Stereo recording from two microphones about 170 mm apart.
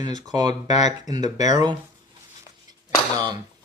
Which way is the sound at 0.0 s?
25° right (ahead or behind).